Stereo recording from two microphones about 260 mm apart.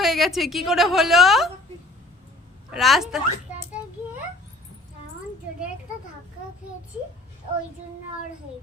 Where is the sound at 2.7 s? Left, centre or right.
Centre.